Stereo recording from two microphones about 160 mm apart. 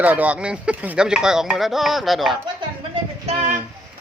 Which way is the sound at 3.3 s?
40° right (ahead or behind).